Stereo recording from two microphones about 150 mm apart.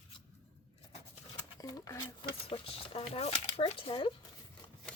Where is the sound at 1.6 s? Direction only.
25° left (ahead or behind).